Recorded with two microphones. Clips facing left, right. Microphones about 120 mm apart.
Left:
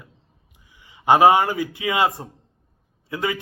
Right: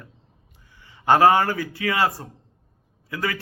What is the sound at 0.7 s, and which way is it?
A man's voice, 15° left (ahead or behind).